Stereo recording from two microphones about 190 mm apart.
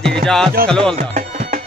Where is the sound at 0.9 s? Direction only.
45° right (ahead or behind).